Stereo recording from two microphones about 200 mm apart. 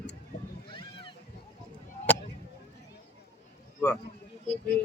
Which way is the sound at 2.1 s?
5° left (ahead or behind).